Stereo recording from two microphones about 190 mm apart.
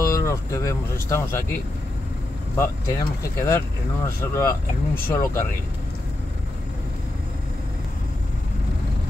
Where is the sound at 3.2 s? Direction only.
15° left (ahead or behind).